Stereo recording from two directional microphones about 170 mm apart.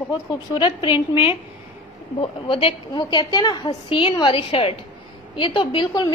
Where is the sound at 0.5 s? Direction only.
30° left (ahead or behind).